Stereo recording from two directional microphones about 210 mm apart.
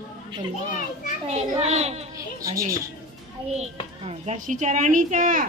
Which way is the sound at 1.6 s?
30° right (ahead or behind).